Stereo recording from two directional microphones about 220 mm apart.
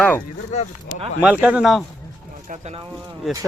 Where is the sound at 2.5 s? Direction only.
30° right (ahead or behind).